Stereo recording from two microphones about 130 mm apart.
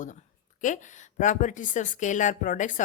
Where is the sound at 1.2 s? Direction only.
70° left (ahead or behind).